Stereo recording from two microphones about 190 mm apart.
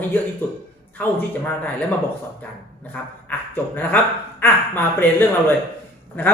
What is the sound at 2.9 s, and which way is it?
Speech, 10° left (ahead or behind).